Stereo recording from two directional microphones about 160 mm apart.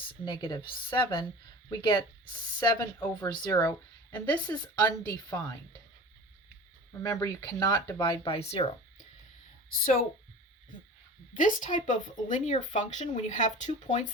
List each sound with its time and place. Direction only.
0.3 s speech: 30° left (ahead or behind)
7.0 s speech: 20° left (ahead or behind); by 8.6 s 40° left (ahead or behind)
9.6 s speech: 60° left (ahead or behind)
11.3 s speech: 55° left (ahead or behind)